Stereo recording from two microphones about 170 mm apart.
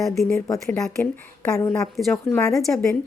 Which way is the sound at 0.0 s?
Centre (ahead or behind).